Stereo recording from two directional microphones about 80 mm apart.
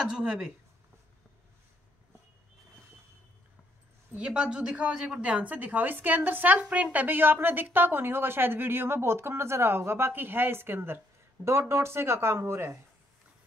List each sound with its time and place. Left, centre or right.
0.0 s a woman's voice: centre
4.1 s a woman's voice: centre; by 12.7 s right